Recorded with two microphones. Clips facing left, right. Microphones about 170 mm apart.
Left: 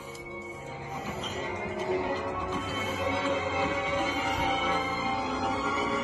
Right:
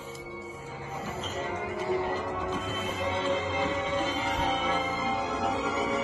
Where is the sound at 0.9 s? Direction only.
15° left (ahead or behind).